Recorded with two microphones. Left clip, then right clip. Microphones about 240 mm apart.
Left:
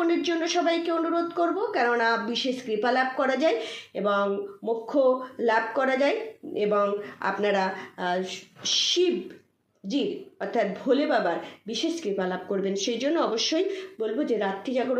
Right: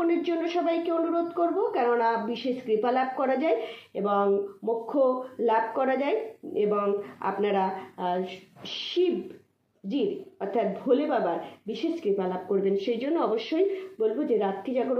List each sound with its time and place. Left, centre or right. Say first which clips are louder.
0.0 s a woman's voice: left 1 dB; centre
10.5 s a woman's voice: even; left